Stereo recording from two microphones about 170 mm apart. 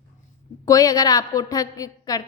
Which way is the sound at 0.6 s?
20° left (ahead or behind).